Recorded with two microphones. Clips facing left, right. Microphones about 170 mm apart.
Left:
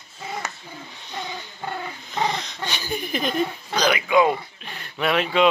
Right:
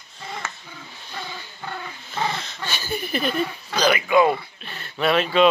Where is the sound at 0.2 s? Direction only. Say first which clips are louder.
Left 2 dB; 10° left (ahead or behind).